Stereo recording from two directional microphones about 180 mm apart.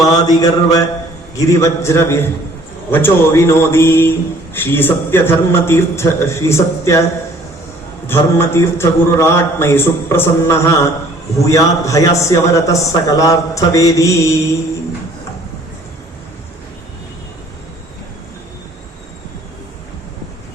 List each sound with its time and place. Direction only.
0.0 s mantra: 20° left (ahead or behind)
1.4 s a man's voice: 15° left (ahead or behind)
8.0 s a man's voice: 15° left (ahead or behind)